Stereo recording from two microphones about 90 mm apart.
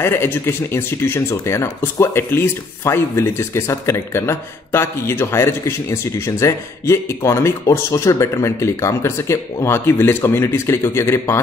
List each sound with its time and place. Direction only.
0.0 s speech: 25° left (ahead or behind)